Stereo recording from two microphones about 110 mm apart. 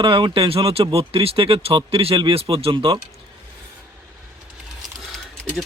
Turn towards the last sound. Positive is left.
turn(degrees=0)  # may be behind; listen again after turning